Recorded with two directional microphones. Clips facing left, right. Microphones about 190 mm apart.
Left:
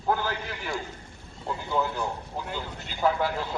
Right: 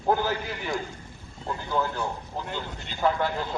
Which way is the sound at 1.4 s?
15° left (ahead or behind).